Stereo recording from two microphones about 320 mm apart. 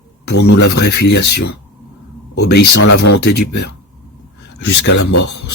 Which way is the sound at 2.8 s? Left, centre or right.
Left.